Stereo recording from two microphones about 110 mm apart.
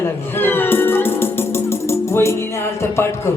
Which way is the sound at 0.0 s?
20° left (ahead or behind).